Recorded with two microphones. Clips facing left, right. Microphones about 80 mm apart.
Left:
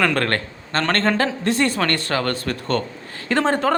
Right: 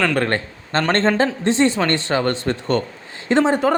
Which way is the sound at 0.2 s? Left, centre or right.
Centre.